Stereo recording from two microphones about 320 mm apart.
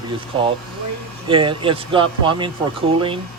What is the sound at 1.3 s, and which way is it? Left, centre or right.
Speech, centre.